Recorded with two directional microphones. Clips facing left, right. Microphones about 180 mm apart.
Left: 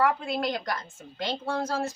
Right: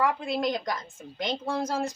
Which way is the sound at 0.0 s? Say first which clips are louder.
Even; 15° right (ahead or behind).